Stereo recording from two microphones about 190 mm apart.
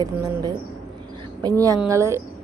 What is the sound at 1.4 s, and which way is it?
Speech, 20° right (ahead or behind).